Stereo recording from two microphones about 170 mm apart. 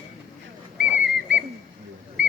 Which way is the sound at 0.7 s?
10° right (ahead or behind).